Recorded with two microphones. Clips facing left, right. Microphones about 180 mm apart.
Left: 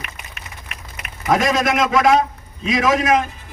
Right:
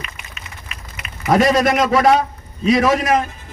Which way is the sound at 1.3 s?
30° right (ahead or behind).